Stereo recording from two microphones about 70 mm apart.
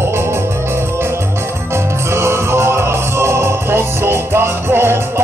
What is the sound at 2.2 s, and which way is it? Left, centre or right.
Music, right.